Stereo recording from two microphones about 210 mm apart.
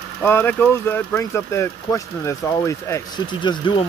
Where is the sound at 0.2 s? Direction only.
10° left (ahead or behind).